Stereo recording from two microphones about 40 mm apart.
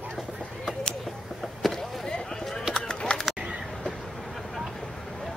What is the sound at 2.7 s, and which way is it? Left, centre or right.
Run, left.